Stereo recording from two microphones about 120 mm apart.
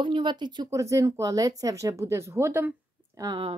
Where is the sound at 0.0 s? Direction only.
40° right (ahead or behind).